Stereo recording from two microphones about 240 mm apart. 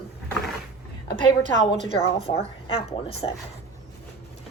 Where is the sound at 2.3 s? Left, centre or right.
Left.